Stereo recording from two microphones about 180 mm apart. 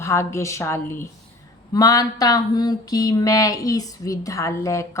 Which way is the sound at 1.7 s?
20° left (ahead or behind).